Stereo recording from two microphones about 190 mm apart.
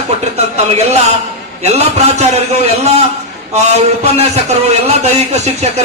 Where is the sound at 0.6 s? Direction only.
35° right (ahead or behind).